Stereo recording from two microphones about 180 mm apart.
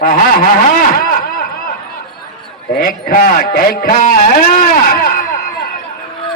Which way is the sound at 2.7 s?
50° left (ahead or behind).